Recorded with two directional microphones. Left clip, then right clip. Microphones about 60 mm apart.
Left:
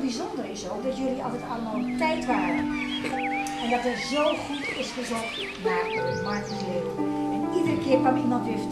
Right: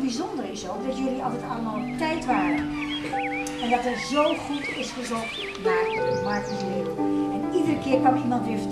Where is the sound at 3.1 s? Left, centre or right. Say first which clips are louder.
Right 1 dB; centre.